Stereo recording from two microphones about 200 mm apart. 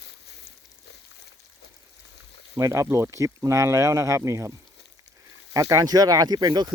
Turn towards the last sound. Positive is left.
turn(degrees=-20)  # may be behind; listen again after turning